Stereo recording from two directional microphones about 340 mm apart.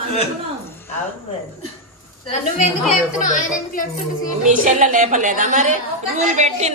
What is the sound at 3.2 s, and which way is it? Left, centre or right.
Speech, left.